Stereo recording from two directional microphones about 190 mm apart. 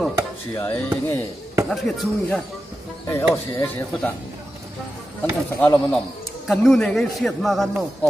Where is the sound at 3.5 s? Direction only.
10° left (ahead or behind).